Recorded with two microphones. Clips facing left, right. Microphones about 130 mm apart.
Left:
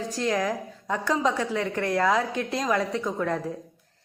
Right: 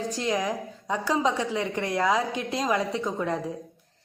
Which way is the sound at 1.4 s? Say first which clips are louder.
Left 1 dB; 15° right (ahead or behind).